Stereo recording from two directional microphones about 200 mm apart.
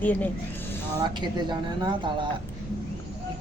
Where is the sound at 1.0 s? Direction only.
20° right (ahead or behind).